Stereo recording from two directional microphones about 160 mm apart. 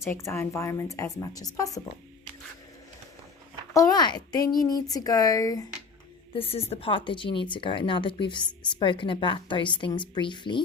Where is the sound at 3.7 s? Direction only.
25° left (ahead or behind).